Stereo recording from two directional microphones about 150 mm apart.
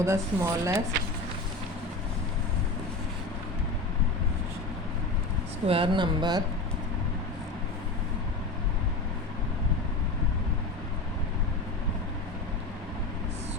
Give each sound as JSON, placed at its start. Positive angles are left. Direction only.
{"t": 0.0, "sound": "speech", "side_deg": -20}
{"t": 5.6, "sound": "speech", "side_deg": -35}